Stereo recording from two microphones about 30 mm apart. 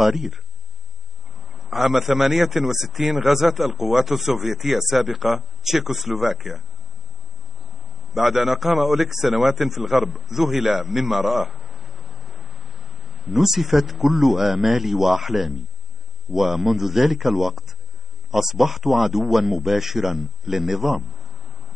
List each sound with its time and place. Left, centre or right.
0.0 s a man's voice: centre
1.4 s a sound: centre
2.0 s a man's voice: centre
8.1 s a man's voice: centre
10.8 s a sound: centre
13.4 s a man's voice: centre
19.5 s speech: right
19.8 s a man's voice: centre
21.1 s a sound: centre